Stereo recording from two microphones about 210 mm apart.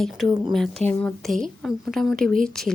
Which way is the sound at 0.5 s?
Centre (ahead or behind).